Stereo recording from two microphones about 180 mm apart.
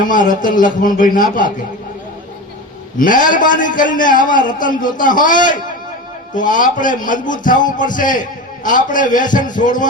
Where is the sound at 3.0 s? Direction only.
50° left (ahead or behind).